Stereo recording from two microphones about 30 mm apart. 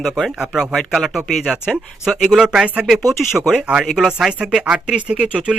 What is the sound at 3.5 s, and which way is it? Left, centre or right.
Speech, right.